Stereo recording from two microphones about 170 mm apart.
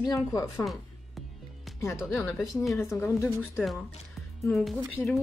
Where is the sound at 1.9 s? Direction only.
Centre (ahead or behind).